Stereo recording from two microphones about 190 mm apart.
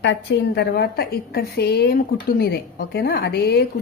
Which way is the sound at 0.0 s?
65° left (ahead or behind).